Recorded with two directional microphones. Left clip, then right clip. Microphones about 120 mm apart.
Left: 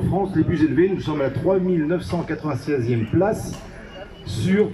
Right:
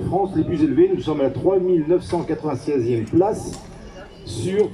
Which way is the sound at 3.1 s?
25° right (ahead or behind).